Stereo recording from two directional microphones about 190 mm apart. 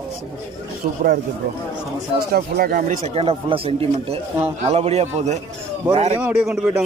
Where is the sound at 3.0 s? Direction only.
30° right (ahead or behind).